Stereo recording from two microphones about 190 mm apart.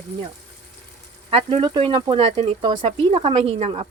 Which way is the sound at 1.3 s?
25° right (ahead or behind).